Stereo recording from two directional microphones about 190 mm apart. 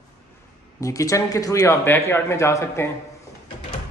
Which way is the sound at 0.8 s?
15° left (ahead or behind).